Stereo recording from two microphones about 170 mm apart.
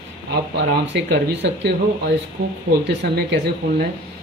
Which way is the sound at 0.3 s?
90° right.